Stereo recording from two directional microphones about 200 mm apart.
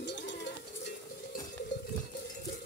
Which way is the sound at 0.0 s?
60° left (ahead or behind).